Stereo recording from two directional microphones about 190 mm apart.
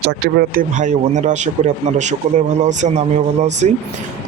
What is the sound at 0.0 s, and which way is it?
A man's voice, 55° right (ahead or behind).